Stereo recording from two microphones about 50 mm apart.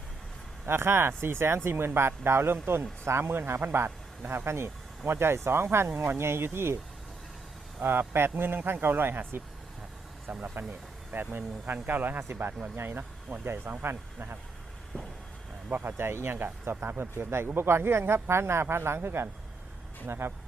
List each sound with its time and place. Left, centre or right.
0.7 s speech: right
4.4 s speech: right
7.8 s speech: right
14.9 s a sound: left
15.7 s speech: right